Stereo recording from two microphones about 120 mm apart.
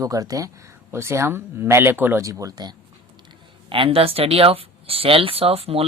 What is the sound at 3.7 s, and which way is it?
Speech, 50° right (ahead or behind).